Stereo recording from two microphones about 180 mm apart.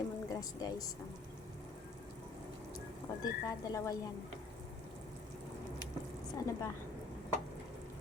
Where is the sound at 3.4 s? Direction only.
20° left (ahead or behind).